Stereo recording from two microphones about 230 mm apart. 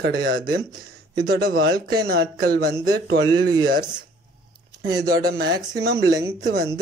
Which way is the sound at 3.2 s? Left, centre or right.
Centre.